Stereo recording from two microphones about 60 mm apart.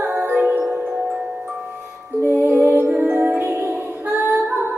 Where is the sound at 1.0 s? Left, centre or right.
Centre.